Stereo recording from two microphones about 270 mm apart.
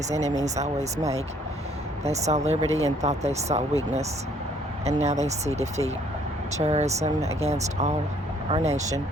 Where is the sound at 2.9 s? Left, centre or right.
Right.